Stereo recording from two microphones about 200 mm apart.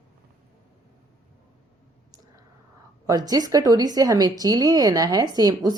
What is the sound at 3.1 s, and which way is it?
Speech, 20° right (ahead or behind).